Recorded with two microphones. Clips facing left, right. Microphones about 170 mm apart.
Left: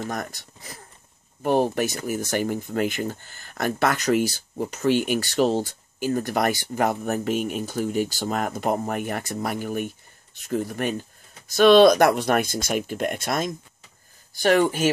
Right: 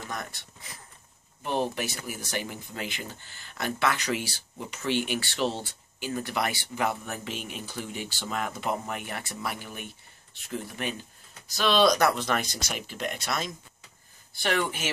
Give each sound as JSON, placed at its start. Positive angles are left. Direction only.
{"t": 0.1, "sound": "speech", "side_deg": 45}